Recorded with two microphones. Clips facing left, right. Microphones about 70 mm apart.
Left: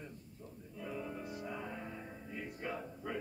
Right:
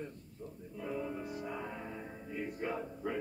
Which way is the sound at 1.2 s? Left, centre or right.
Right.